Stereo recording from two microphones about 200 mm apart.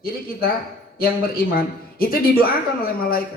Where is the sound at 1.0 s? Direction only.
45° left (ahead or behind).